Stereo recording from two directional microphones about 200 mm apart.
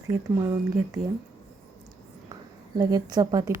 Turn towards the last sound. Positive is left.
turn(degrees=-20)  # may be behind; listen again after turning